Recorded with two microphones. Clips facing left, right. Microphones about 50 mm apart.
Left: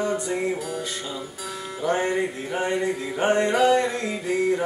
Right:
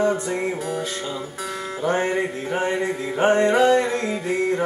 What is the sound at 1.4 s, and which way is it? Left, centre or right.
Music, right.